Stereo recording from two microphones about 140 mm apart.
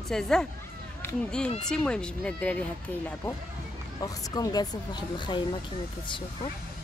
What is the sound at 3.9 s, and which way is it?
Speech, 25° left (ahead or behind).